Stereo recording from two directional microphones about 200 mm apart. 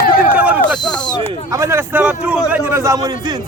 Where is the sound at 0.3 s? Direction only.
5° right (ahead or behind).